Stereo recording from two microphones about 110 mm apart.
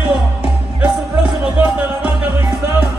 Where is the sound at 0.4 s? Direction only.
10° right (ahead or behind).